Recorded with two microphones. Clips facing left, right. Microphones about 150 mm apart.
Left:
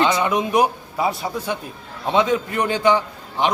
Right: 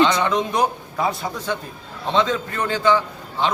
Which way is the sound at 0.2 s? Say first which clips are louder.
Left 2 dB; 10° left (ahead or behind).